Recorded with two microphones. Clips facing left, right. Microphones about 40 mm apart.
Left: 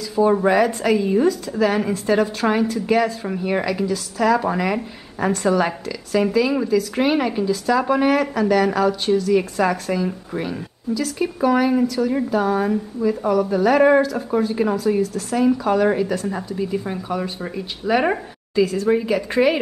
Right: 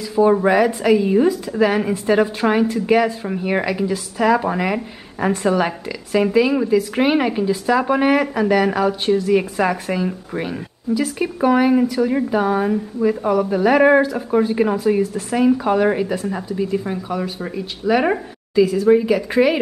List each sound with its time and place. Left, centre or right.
0.1 s a woman's voice: centre